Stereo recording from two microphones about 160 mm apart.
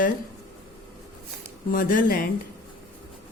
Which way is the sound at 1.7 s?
60° left (ahead or behind).